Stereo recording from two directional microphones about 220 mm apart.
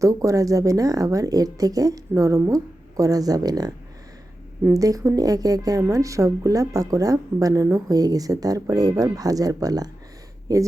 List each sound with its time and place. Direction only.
0.0 s a woman's voice: 15° right (ahead or behind)